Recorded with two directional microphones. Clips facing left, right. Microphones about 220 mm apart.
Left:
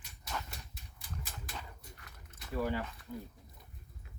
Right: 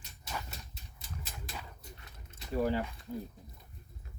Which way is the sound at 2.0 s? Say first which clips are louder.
Right 2 dB; 25° right (ahead or behind).